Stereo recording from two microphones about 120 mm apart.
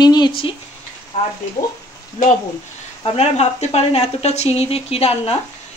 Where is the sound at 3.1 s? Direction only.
60° left (ahead or behind).